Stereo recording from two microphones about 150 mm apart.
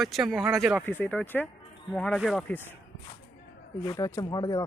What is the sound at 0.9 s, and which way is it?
Speech, 10° left (ahead or behind).